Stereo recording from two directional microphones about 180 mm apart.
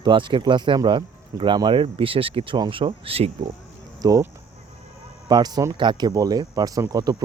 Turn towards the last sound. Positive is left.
turn(degrees=-20)  # may be behind; listen again after turning